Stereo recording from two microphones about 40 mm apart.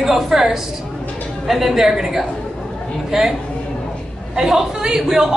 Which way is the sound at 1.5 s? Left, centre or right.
Centre.